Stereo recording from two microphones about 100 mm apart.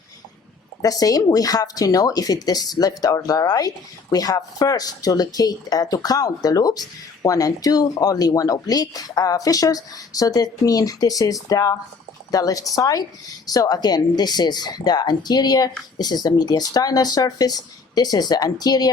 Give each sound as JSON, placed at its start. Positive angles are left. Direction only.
{"t": 0.8, "sound": "speech", "side_deg": 35}